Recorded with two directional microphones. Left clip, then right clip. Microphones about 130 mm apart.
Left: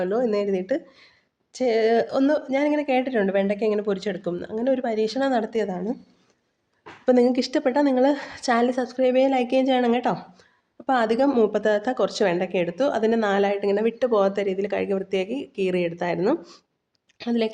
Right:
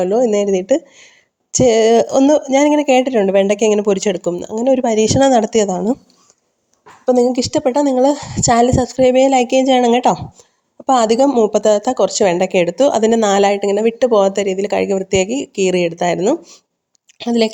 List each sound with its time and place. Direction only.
0.0 s a woman's voice: 45° right (ahead or behind)
3.4 s speech: 70° right (ahead or behind)
3.8 s speech: 60° right (ahead or behind)
7.0 s a woman's voice: 25° right (ahead or behind)
7.3 s a woman's voice: 35° right (ahead or behind)
11.3 s speech: 30° right (ahead or behind)
11.5 s a woman's voice: 45° right (ahead or behind)
12.3 s a woman's voice: 55° right (ahead or behind)